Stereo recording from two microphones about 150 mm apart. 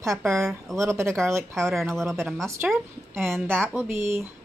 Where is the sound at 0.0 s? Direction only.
20° right (ahead or behind).